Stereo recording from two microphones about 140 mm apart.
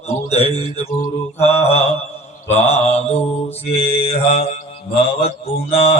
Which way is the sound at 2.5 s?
50° left (ahead or behind).